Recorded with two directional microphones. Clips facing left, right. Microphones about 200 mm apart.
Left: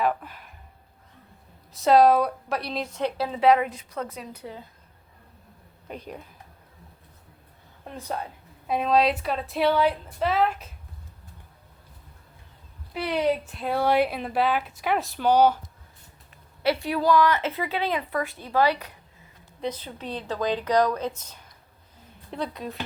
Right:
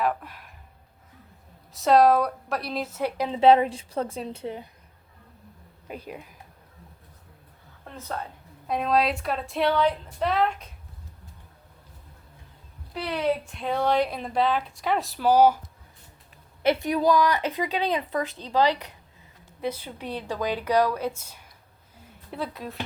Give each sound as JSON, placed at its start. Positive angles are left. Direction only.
{"t": 0.0, "sound": "speech", "side_deg": 0}
{"t": 1.7, "sound": "a woman's voice", "side_deg": 0}
{"t": 3.2, "sound": "a woman's voice", "side_deg": -25}
{"t": 5.9, "sound": "a woman's voice", "side_deg": -5}
{"t": 7.9, "sound": "a woman's voice", "side_deg": 15}
{"t": 8.6, "sound": "a woman's voice", "side_deg": 0}
{"t": 13.4, "sound": "a woman's voice", "side_deg": 5}
{"t": 16.6, "sound": "a woman's voice", "side_deg": -20}